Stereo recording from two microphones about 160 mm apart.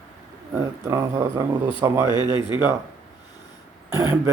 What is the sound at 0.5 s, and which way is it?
Speech, 20° right (ahead or behind).